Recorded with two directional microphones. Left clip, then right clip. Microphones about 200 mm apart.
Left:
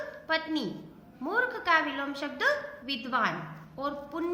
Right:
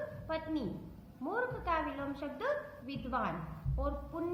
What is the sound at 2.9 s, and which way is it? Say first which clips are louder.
Speech: left 8 dB; 15° left (ahead or behind).